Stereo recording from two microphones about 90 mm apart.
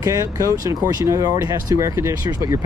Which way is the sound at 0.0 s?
40° right (ahead or behind).